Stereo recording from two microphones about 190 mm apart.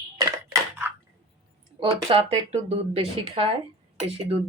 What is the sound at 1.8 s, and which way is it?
Speech, 30° right (ahead or behind).